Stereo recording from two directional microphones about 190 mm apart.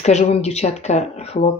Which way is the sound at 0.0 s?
35° left (ahead or behind).